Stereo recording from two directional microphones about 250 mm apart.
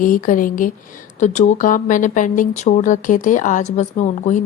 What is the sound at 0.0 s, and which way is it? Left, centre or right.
Speech, left.